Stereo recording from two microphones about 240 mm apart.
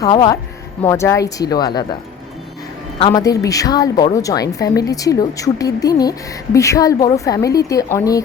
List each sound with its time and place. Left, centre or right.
0.0 s speech: centre
3.0 s speech: centre